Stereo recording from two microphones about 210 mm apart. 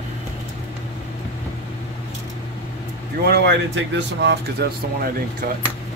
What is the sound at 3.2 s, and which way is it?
Speech, 55° right (ahead or behind).